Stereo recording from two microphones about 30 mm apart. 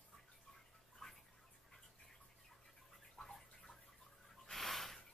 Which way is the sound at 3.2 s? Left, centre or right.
Centre.